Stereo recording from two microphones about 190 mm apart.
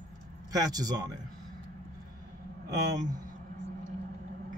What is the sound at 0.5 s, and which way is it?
Speech, 20° right (ahead or behind).